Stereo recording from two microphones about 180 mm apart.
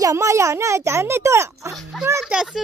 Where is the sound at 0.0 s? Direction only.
15° right (ahead or behind).